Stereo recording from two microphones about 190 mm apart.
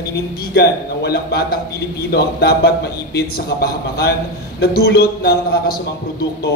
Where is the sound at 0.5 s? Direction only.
55° left (ahead or behind).